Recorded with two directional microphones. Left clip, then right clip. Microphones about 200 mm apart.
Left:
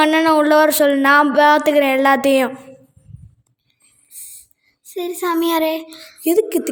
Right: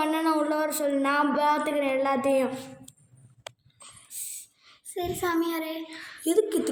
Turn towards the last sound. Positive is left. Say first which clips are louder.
# left 8 dB
turn(degrees=35)  # may be behind; listen again after turning